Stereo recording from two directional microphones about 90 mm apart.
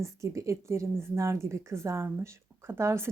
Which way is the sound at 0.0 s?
35° right (ahead or behind).